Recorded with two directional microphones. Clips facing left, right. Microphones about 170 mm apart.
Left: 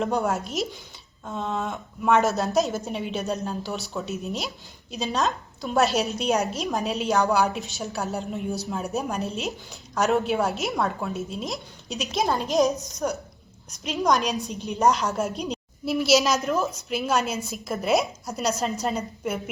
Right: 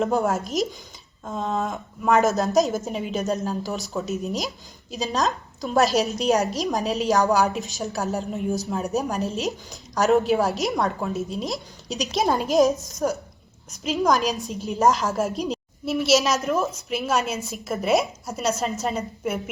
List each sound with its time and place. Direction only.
0.0 s a woman's voice: centre (ahead or behind)
0.4 s speech: 40° right (ahead or behind)
1.2 s a woman's voice: centre (ahead or behind)
4.3 s speech: 40° right (ahead or behind)
5.0 s a woman's voice: centre (ahead or behind)
9.2 s speech: 40° right (ahead or behind)
9.9 s a woman's voice: centre (ahead or behind)